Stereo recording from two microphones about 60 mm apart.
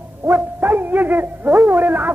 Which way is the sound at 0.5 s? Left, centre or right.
Right.